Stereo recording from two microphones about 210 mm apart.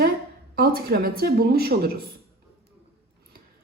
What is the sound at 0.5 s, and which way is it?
A woman's voice, 45° right (ahead or behind).